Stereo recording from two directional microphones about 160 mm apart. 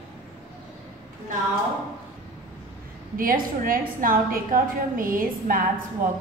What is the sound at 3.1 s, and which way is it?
A woman's voice, 60° right (ahead or behind).